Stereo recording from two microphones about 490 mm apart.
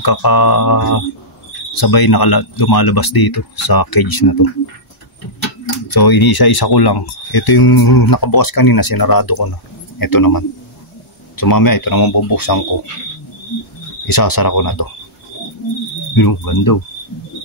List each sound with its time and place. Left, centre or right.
0.0 s speech: left
5.9 s speech: left
14.0 s speech: left
16.2 s speech: left